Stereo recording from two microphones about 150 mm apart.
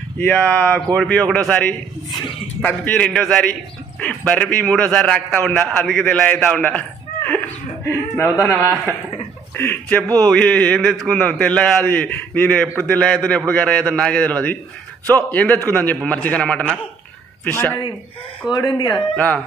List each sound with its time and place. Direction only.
0.2 s a man's voice: 10° left (ahead or behind)
7.2 s chuckle: 10° left (ahead or behind)
9.6 s a man's voice: 15° left (ahead or behind)
18.5 s speech: 25° left (ahead or behind)
19.1 s a man's voice: 10° left (ahead or behind)